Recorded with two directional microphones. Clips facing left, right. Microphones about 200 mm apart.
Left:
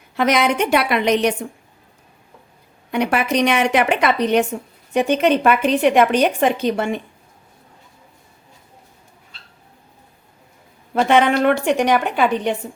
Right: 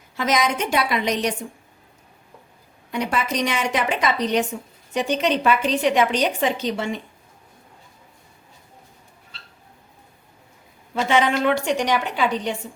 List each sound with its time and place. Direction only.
0.2 s a woman's voice: 60° left (ahead or behind)
2.9 s a woman's voice: 65° left (ahead or behind)
10.9 s a woman's voice: 55° left (ahead or behind)